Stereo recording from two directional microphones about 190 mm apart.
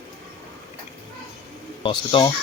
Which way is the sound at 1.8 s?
25° left (ahead or behind).